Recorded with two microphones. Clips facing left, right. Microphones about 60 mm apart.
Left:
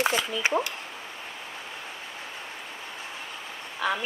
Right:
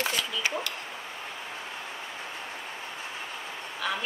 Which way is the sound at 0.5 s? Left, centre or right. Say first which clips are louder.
Left 7 dB; left.